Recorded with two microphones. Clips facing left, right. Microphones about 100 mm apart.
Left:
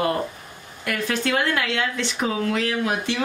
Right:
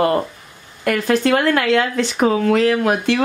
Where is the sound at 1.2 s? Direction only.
55° right (ahead or behind).